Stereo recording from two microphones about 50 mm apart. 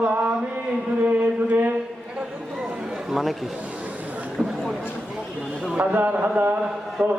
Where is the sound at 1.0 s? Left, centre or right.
Right.